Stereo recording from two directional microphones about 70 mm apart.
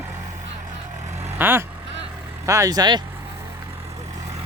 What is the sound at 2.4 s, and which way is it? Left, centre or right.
Speech, right.